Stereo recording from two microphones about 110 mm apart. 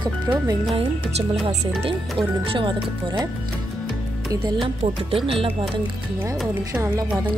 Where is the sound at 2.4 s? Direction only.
50° right (ahead or behind).